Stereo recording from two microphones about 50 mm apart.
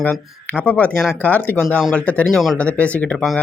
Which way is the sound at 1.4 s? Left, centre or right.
Left.